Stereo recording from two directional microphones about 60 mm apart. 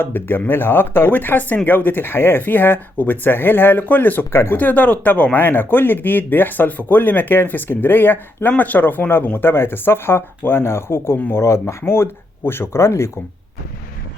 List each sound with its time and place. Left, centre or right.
0.0 s speech: left
4.3 s speech: left
4.5 s speech: left